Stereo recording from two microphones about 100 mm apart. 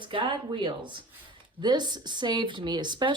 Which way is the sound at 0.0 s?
55° right (ahead or behind).